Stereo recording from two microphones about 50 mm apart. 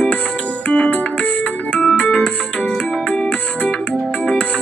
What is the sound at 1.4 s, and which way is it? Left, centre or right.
Music, centre.